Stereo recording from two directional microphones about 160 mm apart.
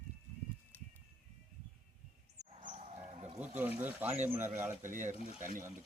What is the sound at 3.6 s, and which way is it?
Speech, 10° right (ahead or behind).